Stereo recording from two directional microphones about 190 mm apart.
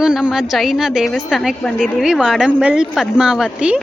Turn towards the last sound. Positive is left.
turn(degrees=-5)  # may be behind; listen again after turning